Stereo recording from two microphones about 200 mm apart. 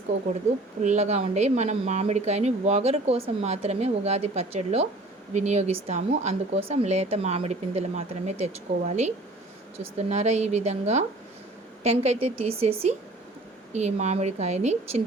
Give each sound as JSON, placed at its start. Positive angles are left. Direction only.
{"t": 0.8, "sound": "speech", "side_deg": -35}